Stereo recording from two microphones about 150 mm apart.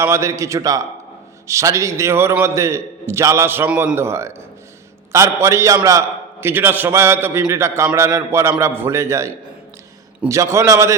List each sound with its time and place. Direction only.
0.0 s a man's voice: 20° right (ahead or behind)